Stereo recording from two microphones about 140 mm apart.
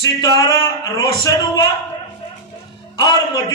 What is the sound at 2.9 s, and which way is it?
Speech, 25° left (ahead or behind).